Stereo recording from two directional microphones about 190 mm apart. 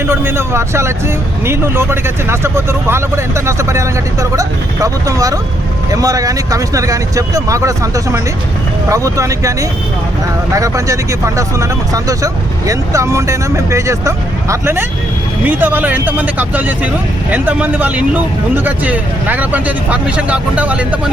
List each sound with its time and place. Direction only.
0.1 s speech: 15° right (ahead or behind)